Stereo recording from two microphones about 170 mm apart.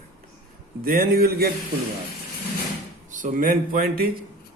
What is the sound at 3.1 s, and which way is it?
Speech, 50° right (ahead or behind).